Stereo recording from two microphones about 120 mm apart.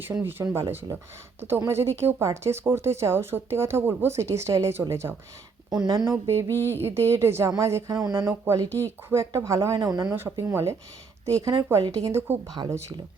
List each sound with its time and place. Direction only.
0.0 s speech: 20° right (ahead or behind)
5.7 s speech: 35° right (ahead or behind)
6.1 s speech: 20° right (ahead or behind)
8.3 s speech: 25° right (ahead or behind)
9.7 s speech: 35° right (ahead or behind)
10.1 s speech: 20° right (ahead or behind)